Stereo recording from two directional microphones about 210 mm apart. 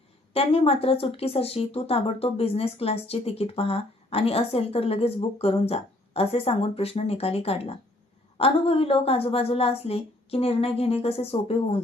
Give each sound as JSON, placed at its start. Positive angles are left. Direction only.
{"t": 0.3, "sound": "speech", "side_deg": 25}